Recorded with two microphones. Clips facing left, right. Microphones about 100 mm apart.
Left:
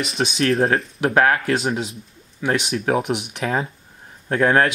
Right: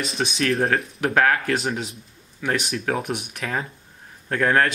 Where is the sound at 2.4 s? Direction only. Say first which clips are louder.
Left 3 dB; 20° left (ahead or behind).